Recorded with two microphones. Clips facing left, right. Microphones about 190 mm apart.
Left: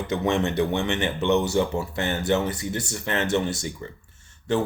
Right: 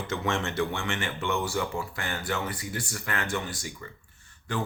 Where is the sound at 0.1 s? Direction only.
20° left (ahead or behind).